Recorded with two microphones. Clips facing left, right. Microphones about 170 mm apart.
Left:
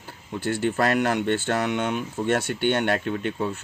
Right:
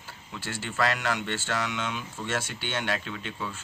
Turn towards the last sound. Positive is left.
turn(degrees=50)  # may be behind; listen again after turning